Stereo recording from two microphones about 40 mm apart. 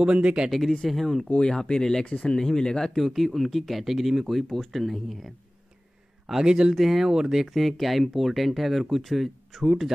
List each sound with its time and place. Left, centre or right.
0.0 s speech: right
0.5 s speech: centre
1.7 s speech: centre
3.0 s speech: centre
6.4 s speech: centre
6.7 s speech: centre
7.1 s speech: centre